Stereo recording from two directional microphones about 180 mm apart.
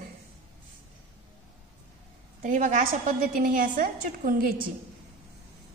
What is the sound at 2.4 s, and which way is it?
A woman's voice, 45° right (ahead or behind).